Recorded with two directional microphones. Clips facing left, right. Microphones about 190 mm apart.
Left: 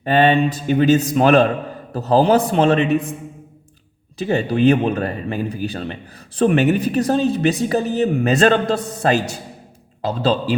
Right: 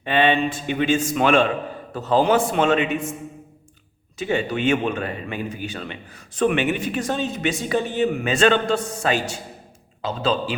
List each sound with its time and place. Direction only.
0.0 s a man's voice: 40° left (ahead or behind)
4.2 s a man's voice: 35° left (ahead or behind)